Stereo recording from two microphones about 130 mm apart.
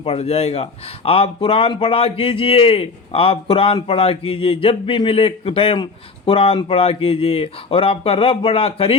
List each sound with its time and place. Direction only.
0.0 s a man's voice: 50° left (ahead or behind)